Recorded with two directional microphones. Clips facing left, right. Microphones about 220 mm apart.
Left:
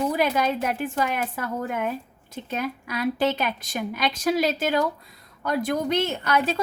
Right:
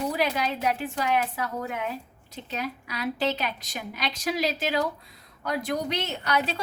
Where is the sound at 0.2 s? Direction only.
50° left (ahead or behind).